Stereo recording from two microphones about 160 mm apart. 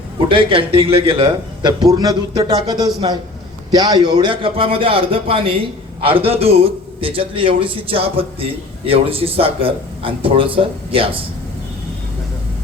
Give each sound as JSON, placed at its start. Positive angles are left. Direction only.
{"t": 0.3, "sound": "a man's voice", "side_deg": -35}